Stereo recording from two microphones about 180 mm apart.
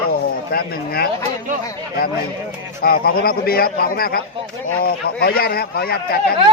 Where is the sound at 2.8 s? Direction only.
55° left (ahead or behind).